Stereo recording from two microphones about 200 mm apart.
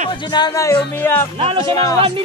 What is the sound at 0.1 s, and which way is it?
Speech, 20° left (ahead or behind).